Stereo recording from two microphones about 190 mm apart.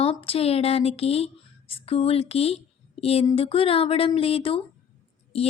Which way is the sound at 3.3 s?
30° left (ahead or behind).